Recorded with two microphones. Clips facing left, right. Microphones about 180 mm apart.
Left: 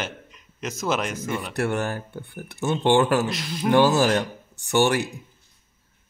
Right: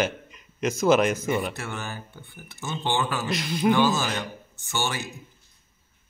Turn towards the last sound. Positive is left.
turn(degrees=70)  # may be behind; listen again after turning